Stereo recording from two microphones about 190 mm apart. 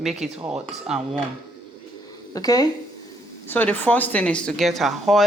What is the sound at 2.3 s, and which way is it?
Speech, 20° left (ahead or behind).